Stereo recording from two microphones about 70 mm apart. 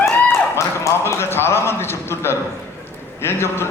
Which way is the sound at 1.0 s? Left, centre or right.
Left.